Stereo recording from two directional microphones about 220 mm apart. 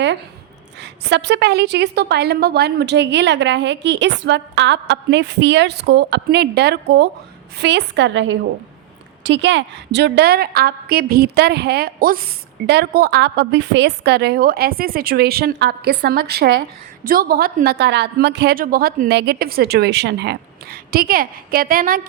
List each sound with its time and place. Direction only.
0.8 s a woman's voice: 50° right (ahead or behind)